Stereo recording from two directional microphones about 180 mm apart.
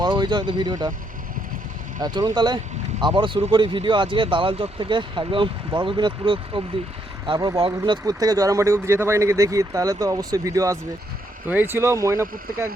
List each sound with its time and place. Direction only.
0.0 s speech: 25° right (ahead or behind)
2.0 s speech: 20° right (ahead or behind)